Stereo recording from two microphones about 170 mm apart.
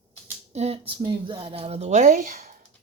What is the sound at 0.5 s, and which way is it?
A woman's voice, 35° right (ahead or behind).